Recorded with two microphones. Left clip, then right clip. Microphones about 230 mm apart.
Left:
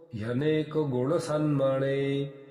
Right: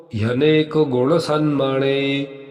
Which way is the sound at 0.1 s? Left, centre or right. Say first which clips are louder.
Right 12 dB; right.